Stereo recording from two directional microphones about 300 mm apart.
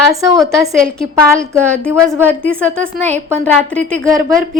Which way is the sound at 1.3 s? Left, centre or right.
Centre.